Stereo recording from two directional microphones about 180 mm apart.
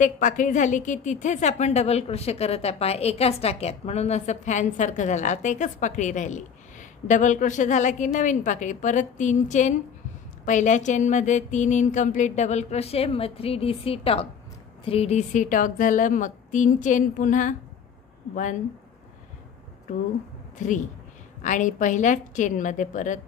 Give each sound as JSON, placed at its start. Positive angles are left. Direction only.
{"t": 0.0, "sound": "a woman's voice", "side_deg": 45}
{"t": 10.4, "sound": "a sound", "side_deg": 40}
{"t": 14.9, "sound": "a woman's voice", "side_deg": 35}
{"t": 20.5, "sound": "a woman's voice", "side_deg": 45}